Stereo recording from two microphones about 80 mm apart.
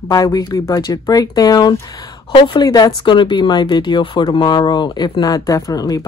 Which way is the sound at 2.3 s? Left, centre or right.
Left.